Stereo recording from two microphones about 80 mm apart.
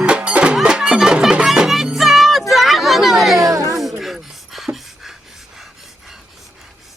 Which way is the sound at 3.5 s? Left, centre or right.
Right.